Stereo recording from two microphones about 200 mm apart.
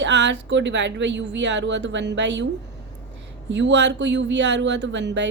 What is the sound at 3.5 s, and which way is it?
A woman's voice, 65° right (ahead or behind).